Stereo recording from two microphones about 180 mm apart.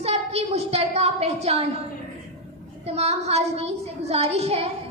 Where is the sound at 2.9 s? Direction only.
35° right (ahead or behind).